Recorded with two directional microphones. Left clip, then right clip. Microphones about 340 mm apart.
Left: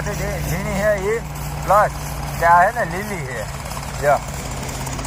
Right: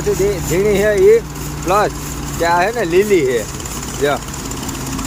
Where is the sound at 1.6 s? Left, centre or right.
Right.